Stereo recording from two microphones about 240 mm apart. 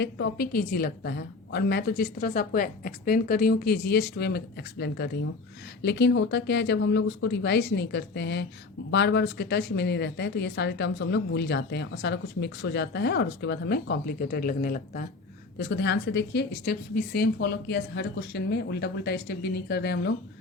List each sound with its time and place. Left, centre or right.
0.0 s a woman's voice: left